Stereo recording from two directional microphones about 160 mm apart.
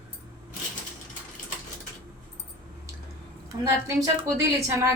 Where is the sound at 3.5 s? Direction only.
25° right (ahead or behind).